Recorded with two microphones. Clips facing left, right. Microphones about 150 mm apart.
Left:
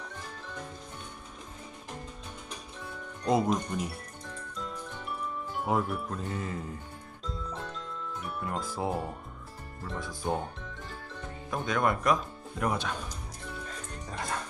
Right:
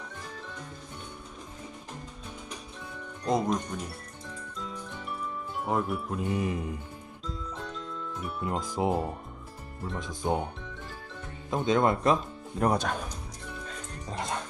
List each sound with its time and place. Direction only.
3.2 s music: 5° left (ahead or behind)
5.5 s speech: centre (ahead or behind)
6.1 s music: 15° right (ahead or behind)
7.3 s music: centre (ahead or behind)
8.4 s speech: 20° right (ahead or behind)
10.0 s speech: 20° right (ahead or behind)
11.5 s speech: 25° right (ahead or behind); by 13.0 s 45° right (ahead or behind)
14.1 s music: 20° right (ahead or behind)